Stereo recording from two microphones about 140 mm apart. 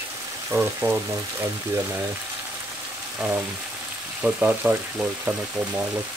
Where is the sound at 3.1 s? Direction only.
15° right (ahead or behind).